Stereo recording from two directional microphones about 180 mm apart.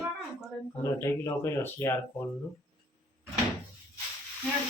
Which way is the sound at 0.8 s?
15° left (ahead or behind).